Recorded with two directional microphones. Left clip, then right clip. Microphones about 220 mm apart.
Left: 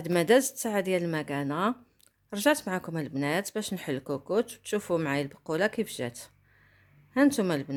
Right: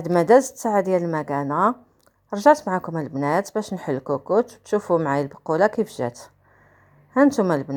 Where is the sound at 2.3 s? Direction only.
5° left (ahead or behind).